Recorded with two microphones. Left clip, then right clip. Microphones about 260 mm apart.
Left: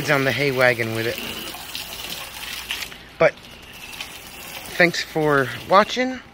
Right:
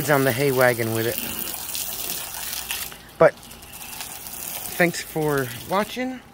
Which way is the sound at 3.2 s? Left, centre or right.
Right.